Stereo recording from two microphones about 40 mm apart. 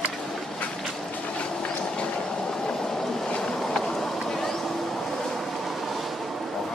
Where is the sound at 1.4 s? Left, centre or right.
Left.